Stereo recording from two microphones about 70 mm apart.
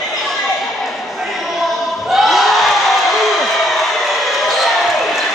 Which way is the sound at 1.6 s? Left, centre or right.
Centre.